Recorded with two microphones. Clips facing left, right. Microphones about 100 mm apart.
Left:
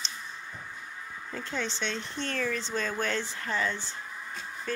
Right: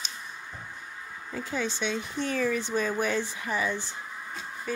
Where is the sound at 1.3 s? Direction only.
5° right (ahead or behind).